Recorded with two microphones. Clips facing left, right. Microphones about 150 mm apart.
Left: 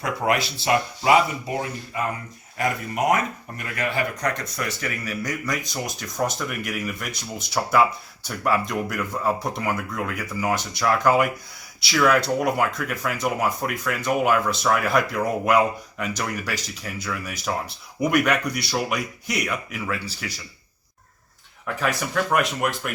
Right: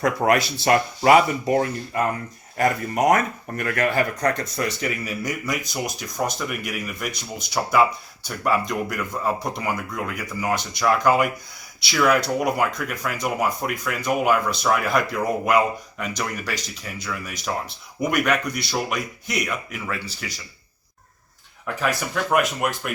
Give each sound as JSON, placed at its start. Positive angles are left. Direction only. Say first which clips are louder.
{"t": 0.0, "sound": "speech", "louder": "right 4 dB", "side_deg": -45}
{"t": 2.6, "sound": "speech", "louder": "right 4 dB", "side_deg": -40}
{"t": 3.6, "sound": "speech", "louder": "right 5 dB", "side_deg": -55}
{"t": 4.2, "sound": "speech", "louder": "right 4 dB", "side_deg": -25}
{"t": 5.0, "sound": "speech", "louder": "right 1 dB", "side_deg": -10}
{"t": 18.9, "sound": "speech", "louder": "left 1 dB", "side_deg": 5}
{"t": 21.8, "sound": "speech", "louder": "even", "side_deg": 0}